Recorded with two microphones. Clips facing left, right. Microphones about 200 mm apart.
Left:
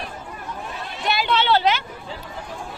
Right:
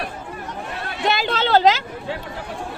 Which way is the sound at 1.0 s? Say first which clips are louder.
Right 3 dB; 90° right.